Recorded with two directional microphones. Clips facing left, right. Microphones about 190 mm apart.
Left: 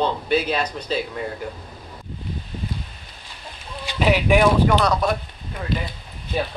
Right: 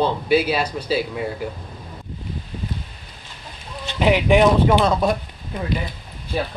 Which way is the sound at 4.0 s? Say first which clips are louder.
Right 2 dB; 20° right (ahead or behind).